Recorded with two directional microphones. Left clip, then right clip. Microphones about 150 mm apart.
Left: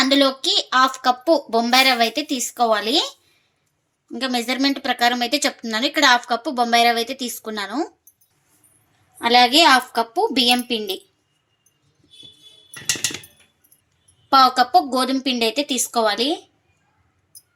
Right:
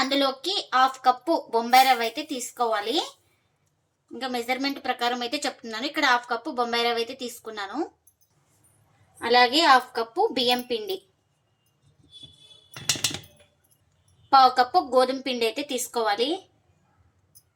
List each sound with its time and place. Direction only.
0.0 s speech: 80° left
4.1 s speech: 75° left (ahead or behind); by 7.9 s 60° left (ahead or behind)
9.1 s a woman's voice: 55° left (ahead or behind)
14.3 s a woman's voice: 65° left (ahead or behind)